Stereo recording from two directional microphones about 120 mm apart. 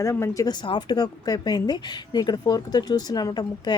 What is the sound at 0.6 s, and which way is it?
Speech, 40° left (ahead or behind).